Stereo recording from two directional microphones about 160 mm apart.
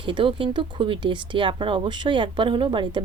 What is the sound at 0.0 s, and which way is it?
Speech, 30° right (ahead or behind).